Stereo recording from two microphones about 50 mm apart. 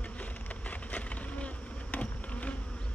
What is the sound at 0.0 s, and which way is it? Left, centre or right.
Insect, left.